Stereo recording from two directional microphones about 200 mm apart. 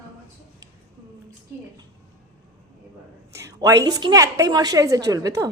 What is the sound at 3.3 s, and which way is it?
A woman's voice, 15° right (ahead or behind).